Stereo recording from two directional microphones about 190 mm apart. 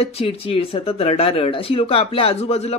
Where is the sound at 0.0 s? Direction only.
30° left (ahead or behind).